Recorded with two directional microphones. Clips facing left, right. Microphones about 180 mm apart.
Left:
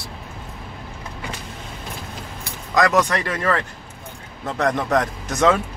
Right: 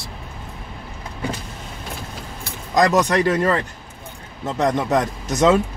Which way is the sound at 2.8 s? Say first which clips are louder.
Right 2 dB; 25° right (ahead or behind).